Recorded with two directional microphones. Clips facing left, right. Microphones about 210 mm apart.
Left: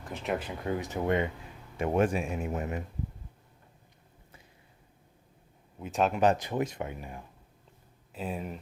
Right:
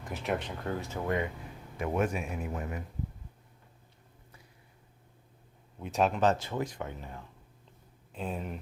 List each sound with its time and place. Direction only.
0.1 s speech: centre (ahead or behind); by 2.8 s 25° left (ahead or behind)
5.8 s speech: centre (ahead or behind)
6.1 s speech: 15° left (ahead or behind)